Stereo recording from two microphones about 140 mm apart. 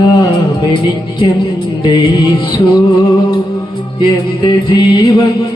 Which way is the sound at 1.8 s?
30° left (ahead or behind).